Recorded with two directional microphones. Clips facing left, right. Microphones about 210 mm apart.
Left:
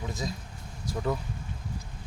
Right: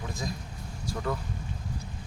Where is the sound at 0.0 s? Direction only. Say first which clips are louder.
Left 2 dB; 20° left (ahead or behind).